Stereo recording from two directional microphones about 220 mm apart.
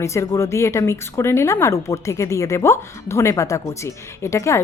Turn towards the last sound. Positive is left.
turn(degrees=15)  # may be behind; listen again after turning